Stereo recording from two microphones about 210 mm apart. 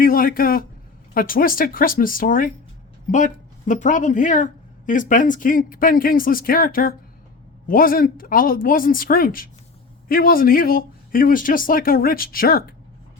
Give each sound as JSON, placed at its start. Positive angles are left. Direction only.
{"t": 0.0, "sound": "a sound", "side_deg": 45}
{"t": 1.1, "sound": "speech", "side_deg": 40}
{"t": 3.7, "sound": "speech", "side_deg": 35}